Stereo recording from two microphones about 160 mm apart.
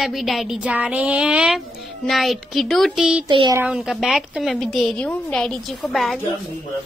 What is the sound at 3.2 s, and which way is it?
Child singing, 30° right (ahead or behind).